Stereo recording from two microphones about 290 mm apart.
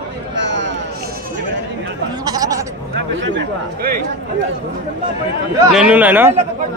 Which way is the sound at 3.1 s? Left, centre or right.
Right.